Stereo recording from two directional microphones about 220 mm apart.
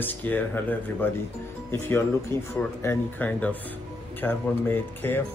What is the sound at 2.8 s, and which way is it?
Speech, 10° left (ahead or behind).